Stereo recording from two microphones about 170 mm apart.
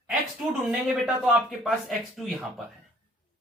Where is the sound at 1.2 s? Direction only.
Centre (ahead or behind).